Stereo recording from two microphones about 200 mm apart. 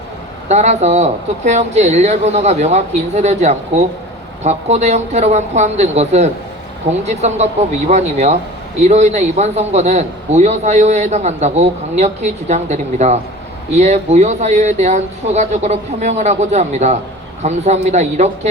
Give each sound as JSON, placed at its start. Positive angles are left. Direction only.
{"t": 0.4, "sound": "a man's voice", "side_deg": -35}